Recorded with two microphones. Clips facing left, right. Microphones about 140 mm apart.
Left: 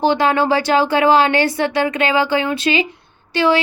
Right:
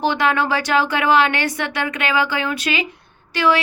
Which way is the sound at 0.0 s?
30° left (ahead or behind).